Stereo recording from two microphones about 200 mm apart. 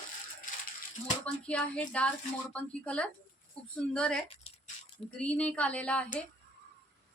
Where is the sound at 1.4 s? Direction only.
5° left (ahead or behind).